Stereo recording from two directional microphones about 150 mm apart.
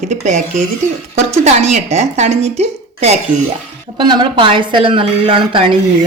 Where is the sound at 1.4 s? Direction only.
50° right (ahead or behind).